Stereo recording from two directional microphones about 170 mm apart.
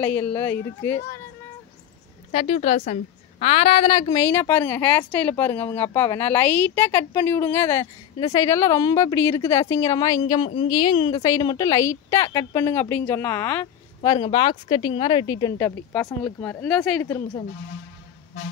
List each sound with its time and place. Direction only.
0.0 s a woman's voice: 10° left (ahead or behind)
2.3 s a woman's voice: 40° left (ahead or behind); by 14.1 s 15° left (ahead or behind)
14.1 s a woman's voice: 30° left (ahead or behind); by 17.0 s 5° left (ahead or behind)
17.0 s a woman's voice: 15° left (ahead or behind)